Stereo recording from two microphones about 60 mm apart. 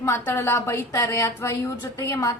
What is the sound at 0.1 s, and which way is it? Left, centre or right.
Speech, left.